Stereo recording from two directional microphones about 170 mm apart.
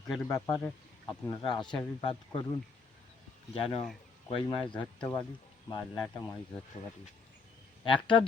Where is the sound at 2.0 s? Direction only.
30° left (ahead or behind).